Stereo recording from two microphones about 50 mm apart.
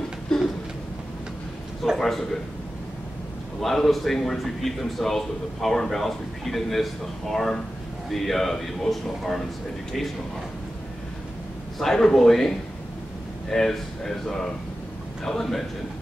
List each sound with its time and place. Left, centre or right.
0.3 s a sound: centre
2.0 s a man's voice: centre
3.6 s a man's voice: centre
11.8 s speech: centre